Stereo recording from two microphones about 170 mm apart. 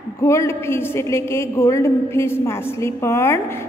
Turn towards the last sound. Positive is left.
turn(degrees=15)  # may be behind; listen again after turning